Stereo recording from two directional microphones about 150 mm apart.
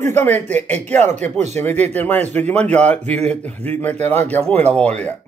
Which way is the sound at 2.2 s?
50° right (ahead or behind).